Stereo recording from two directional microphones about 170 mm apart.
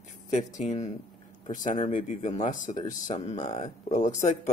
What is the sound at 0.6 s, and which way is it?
Speech, 45° left (ahead or behind).